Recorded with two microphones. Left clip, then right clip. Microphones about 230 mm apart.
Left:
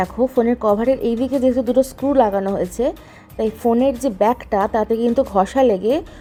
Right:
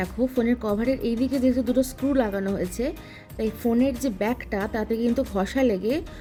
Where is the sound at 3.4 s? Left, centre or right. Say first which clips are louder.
Left 7 dB; centre.